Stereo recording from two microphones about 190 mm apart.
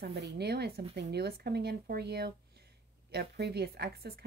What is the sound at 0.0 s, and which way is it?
Speech, 60° right (ahead or behind).